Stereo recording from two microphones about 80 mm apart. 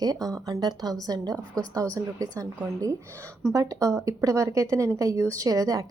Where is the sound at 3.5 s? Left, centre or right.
Right.